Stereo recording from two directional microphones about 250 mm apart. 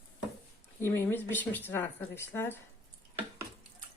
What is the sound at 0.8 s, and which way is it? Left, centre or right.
Speech, centre.